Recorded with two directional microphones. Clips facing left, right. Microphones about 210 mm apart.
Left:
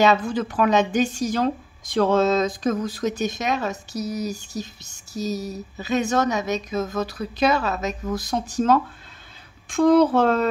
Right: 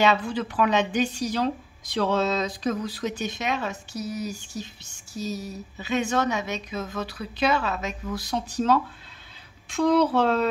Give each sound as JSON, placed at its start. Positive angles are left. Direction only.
{"t": 0.0, "sound": "a woman's voice", "side_deg": 45}